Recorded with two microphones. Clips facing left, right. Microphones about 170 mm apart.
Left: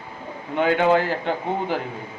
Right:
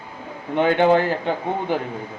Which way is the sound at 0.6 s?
25° right (ahead or behind).